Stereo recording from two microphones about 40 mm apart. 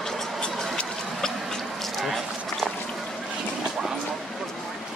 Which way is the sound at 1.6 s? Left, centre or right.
Centre.